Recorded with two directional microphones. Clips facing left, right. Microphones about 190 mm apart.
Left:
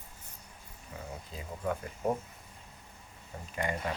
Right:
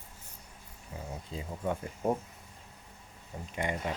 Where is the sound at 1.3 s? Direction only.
25° right (ahead or behind).